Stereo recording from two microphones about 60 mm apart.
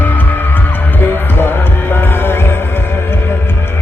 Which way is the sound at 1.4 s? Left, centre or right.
Left.